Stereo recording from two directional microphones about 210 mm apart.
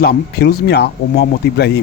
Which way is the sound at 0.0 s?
50° left (ahead or behind).